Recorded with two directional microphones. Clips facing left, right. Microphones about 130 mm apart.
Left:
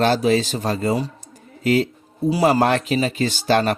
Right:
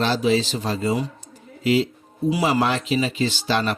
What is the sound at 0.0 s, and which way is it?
Speech, 50° left (ahead or behind).